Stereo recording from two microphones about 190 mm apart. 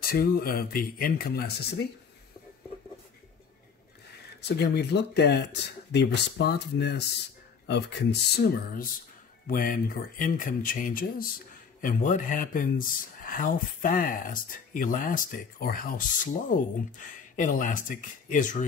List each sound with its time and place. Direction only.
0.0 s speech: 50° left (ahead or behind)
4.4 s speech: 60° left (ahead or behind); by 18.6 s 45° left (ahead or behind)